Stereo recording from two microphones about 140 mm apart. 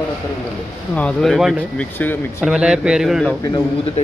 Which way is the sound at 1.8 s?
15° left (ahead or behind).